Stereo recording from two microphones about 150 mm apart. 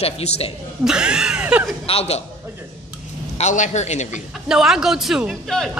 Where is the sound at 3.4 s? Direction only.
50° left (ahead or behind).